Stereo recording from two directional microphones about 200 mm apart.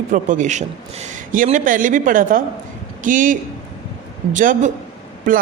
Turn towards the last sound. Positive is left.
turn(degrees=-40)  # may be behind; listen again after turning